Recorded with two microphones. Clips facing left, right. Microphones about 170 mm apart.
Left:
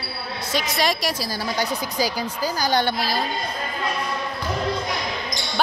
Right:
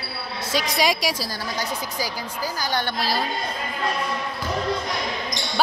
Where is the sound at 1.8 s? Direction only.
75° left (ahead or behind).